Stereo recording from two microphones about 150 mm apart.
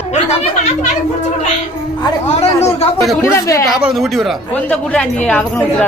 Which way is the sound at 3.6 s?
5° right (ahead or behind).